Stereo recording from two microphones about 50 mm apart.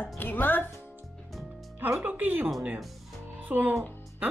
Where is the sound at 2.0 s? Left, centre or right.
Right.